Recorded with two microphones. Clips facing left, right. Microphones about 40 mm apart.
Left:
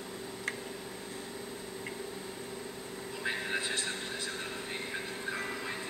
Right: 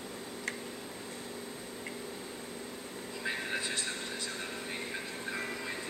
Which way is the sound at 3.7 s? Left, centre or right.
Left.